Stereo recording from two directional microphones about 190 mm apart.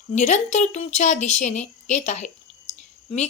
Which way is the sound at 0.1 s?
35° left (ahead or behind).